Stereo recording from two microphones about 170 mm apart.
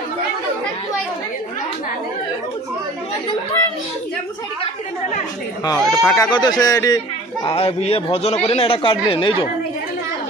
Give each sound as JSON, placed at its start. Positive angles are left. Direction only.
{"t": 5.8, "sound": "speech", "side_deg": 0}
{"t": 6.1, "sound": "speech", "side_deg": 25}
{"t": 7.4, "sound": "a man's voice", "side_deg": 35}